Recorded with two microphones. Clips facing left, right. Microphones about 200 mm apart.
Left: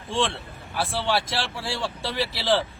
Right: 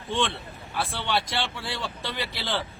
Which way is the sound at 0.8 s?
Centre (ahead or behind).